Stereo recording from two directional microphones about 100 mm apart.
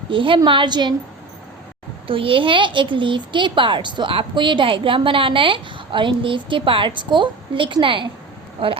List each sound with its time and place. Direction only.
0.1 s a woman's voice: 60° right (ahead or behind)
2.0 s a woman's voice: 60° right (ahead or behind)